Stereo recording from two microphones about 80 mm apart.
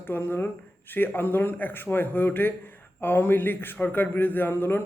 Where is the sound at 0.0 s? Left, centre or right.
Left.